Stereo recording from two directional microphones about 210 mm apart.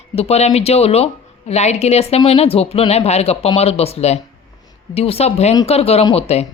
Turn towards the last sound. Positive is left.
turn(degrees=30)  # may be behind; listen again after turning